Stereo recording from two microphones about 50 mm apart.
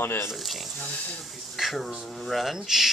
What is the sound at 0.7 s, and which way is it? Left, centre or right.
Speech, left.